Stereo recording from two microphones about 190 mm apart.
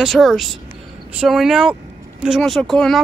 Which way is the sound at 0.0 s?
Centre (ahead or behind).